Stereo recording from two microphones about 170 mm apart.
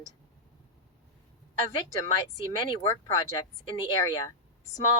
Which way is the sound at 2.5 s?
30° left (ahead or behind).